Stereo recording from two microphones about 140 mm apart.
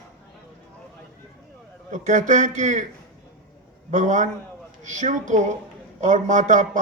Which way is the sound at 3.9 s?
60° right (ahead or behind).